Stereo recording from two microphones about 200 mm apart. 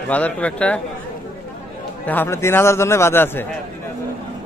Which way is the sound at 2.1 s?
10° left (ahead or behind).